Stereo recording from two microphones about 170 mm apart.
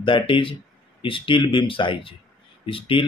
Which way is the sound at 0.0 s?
30° left (ahead or behind).